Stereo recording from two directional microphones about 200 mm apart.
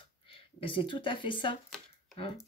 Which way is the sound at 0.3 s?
25° left (ahead or behind).